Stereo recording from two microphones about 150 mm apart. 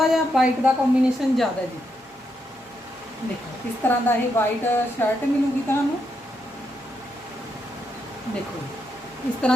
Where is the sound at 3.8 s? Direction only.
15° left (ahead or behind).